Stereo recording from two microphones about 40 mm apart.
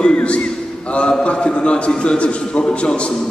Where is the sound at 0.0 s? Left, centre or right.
Left.